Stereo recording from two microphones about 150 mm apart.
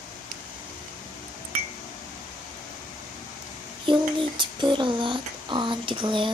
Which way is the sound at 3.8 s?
35° right (ahead or behind).